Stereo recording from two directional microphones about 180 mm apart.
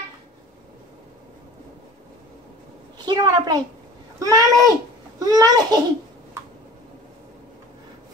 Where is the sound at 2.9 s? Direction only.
20° right (ahead or behind).